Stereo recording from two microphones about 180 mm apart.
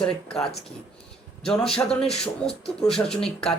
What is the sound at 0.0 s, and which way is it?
Speech, 5° left (ahead or behind).